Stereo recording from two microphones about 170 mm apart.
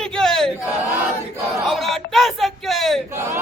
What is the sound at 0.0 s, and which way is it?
Battle cry, 5° left (ahead or behind).